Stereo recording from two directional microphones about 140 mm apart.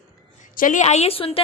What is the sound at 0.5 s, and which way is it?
Speech, 70° left (ahead or behind).